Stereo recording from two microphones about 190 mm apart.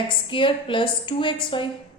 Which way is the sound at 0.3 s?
25° left (ahead or behind).